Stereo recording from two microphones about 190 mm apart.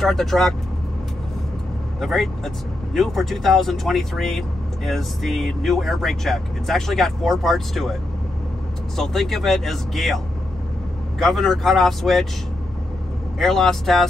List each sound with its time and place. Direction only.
0.0 s speech: centre (ahead or behind)
2.0 s speech: centre (ahead or behind)
8.9 s speech: centre (ahead or behind)
13.4 s speech: centre (ahead or behind)